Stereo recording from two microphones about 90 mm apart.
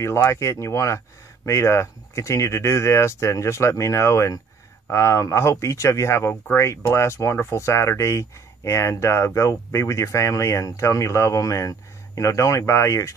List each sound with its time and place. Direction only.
0.0 s speech: 30° left (ahead or behind)